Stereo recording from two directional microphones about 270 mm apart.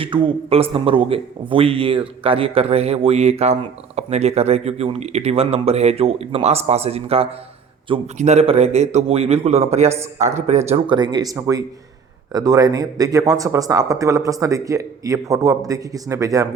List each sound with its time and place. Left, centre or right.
0.0 s a man's voice: centre